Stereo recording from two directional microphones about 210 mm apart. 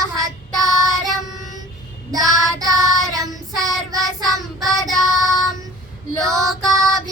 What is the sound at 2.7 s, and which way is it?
Child singing, 15° right (ahead or behind).